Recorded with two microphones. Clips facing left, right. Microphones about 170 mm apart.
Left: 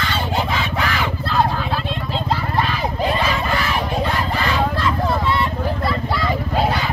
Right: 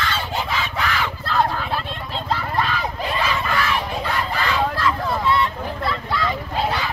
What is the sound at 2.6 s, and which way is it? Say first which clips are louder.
Crowd: left 3 dB; 30° left (ahead or behind).